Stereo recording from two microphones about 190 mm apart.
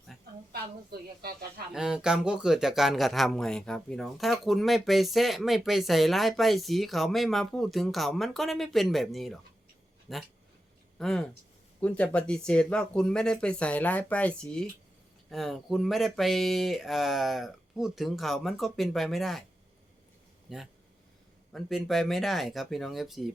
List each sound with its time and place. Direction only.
0.5 s a woman's voice: 55° right (ahead or behind)
1.7 s speech: 5° right (ahead or behind)
20.5 s speech: 5° right (ahead or behind)